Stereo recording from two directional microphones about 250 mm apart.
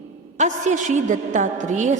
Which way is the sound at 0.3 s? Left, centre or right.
Right.